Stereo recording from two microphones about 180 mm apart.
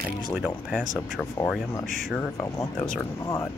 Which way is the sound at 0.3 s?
5° right (ahead or behind).